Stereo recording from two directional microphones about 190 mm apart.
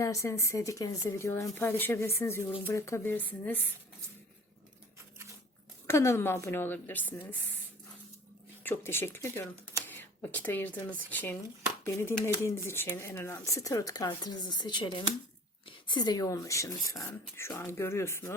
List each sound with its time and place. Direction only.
0.0 s speech: 15° left (ahead or behind)
5.9 s speech: 15° left (ahead or behind)
8.6 s speech: 10° left (ahead or behind)